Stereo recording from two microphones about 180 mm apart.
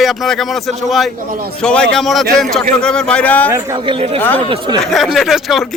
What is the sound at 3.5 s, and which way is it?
Speech, 20° right (ahead or behind).